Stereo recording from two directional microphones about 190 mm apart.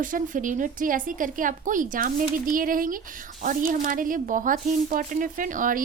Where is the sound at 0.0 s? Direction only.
45° right (ahead or behind).